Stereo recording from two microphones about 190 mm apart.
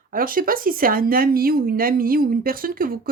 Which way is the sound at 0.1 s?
50° right (ahead or behind).